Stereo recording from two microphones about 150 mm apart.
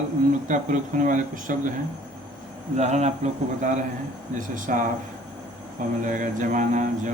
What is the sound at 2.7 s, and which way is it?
Speech, 50° right (ahead or behind).